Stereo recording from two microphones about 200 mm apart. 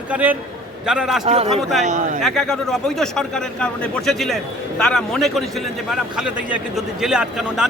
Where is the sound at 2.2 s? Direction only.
Centre (ahead or behind).